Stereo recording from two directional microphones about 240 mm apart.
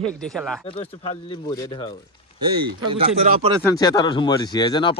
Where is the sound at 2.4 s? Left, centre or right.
Right.